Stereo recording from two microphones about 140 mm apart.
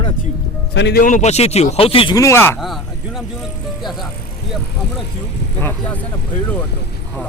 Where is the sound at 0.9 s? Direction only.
70° left (ahead or behind); by 2.1 s 45° left (ahead or behind).